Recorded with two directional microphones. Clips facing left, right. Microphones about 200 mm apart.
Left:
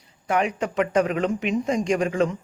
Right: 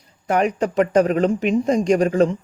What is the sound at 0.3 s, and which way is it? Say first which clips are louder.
Speech: right 4 dB; 40° right (ahead or behind).